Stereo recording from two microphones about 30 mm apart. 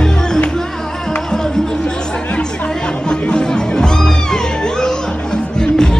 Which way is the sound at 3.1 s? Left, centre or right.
Left.